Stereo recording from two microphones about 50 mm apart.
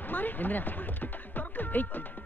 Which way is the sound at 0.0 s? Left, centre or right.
Left.